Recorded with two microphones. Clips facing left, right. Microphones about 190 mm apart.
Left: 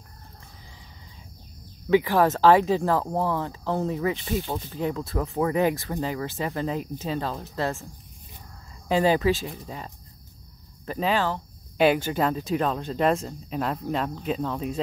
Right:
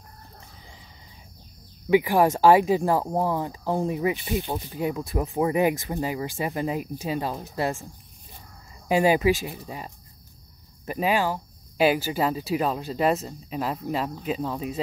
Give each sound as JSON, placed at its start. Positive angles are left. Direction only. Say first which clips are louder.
{"t": 1.9, "sound": "speech", "louder": "right 1 dB", "side_deg": -15}
{"t": 8.8, "sound": "speech", "louder": "right 1 dB", "side_deg": -10}